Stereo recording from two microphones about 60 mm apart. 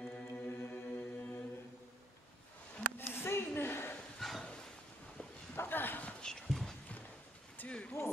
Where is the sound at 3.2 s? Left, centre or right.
Left.